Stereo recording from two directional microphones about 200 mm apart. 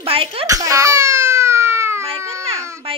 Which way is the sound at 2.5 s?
15° right (ahead or behind).